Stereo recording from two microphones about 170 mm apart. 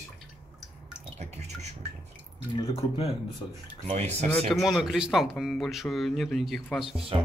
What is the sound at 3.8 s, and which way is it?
Speech, 40° right (ahead or behind).